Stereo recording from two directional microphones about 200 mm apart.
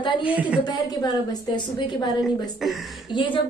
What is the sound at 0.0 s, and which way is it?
Speech, 25° left (ahead or behind).